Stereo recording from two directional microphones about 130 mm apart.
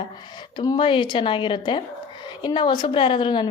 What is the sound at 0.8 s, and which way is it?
A woman's voice, 40° left (ahead or behind).